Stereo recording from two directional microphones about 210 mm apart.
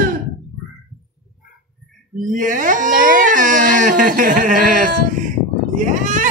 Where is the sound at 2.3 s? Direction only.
40° right (ahead or behind).